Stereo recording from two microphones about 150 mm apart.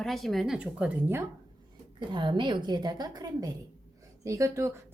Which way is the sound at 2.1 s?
30° right (ahead or behind).